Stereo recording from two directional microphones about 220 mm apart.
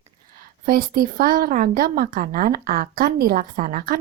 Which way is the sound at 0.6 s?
40° right (ahead or behind).